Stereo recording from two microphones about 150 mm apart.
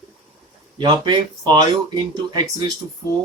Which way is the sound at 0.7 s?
30° right (ahead or behind).